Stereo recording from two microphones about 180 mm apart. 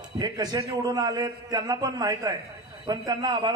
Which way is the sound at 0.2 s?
20° right (ahead or behind).